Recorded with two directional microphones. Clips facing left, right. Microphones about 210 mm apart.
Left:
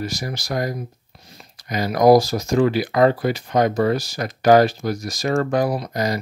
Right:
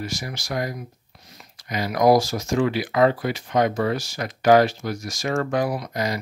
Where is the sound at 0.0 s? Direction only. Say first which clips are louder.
Left 4 dB; 35° left (ahead or behind).